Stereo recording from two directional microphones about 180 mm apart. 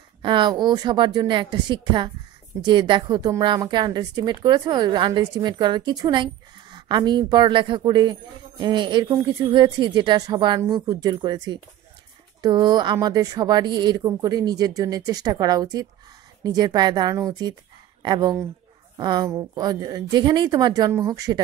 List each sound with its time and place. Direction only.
0.2 s speech: 25° right (ahead or behind)